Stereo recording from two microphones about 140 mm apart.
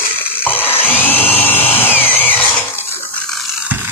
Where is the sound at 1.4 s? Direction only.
15° left (ahead or behind).